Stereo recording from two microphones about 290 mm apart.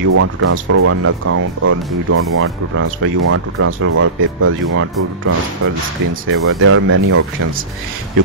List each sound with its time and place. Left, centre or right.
0.1 s speech: right
6.3 s speech: right